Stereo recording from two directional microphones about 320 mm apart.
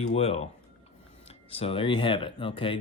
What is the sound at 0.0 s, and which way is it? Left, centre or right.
Speech, centre.